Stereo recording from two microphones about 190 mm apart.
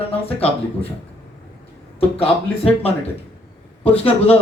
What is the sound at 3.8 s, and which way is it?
Speech, 30° left (ahead or behind).